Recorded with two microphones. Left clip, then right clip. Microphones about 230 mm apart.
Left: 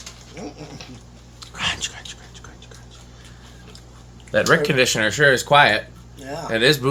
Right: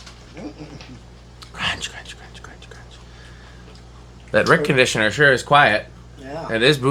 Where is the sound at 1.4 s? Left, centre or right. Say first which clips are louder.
Even; centre.